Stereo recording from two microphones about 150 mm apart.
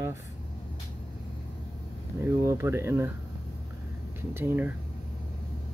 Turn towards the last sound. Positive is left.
turn(degrees=-15)  # may be behind; listen again after turning